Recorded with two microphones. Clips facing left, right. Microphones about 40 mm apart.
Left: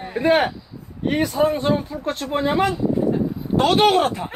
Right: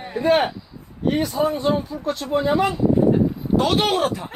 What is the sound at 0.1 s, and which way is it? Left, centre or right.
Speech, left.